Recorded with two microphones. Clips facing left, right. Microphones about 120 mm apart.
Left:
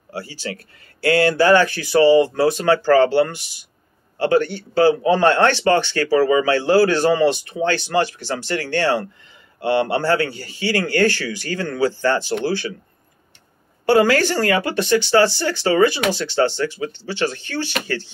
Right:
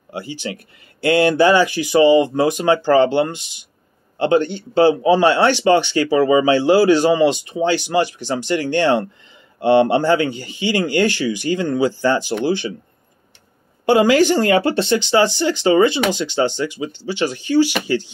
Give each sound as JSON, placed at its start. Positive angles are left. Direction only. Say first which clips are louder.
{"t": 0.1, "sound": "speech", "louder": "right 2 dB", "side_deg": -20}
{"t": 13.8, "sound": "speech", "louder": "right 2 dB", "side_deg": -15}